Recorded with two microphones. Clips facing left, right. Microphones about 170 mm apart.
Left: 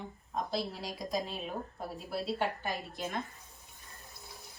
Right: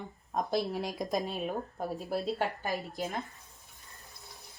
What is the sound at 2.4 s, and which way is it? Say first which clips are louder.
Speech: right 2 dB; 40° right (ahead or behind).